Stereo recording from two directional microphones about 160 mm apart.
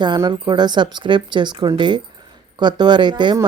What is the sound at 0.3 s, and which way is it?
A woman's voice, 25° right (ahead or behind).